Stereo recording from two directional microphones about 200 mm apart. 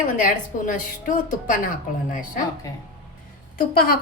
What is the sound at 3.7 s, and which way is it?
Speech, 45° left (ahead or behind).